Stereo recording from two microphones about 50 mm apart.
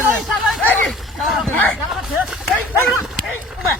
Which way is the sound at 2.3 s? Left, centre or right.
Centre.